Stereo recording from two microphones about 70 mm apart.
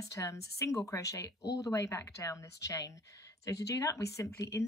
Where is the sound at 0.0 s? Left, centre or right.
Left.